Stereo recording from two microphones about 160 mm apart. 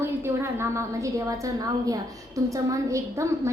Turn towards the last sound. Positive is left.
turn(degrees=-20)  # may be behind; listen again after turning